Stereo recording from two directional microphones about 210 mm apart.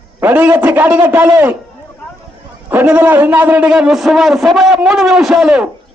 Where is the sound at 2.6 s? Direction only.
5° right (ahead or behind).